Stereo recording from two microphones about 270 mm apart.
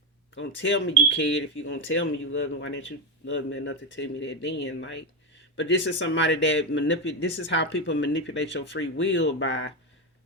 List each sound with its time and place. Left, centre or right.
0.3 s speech: left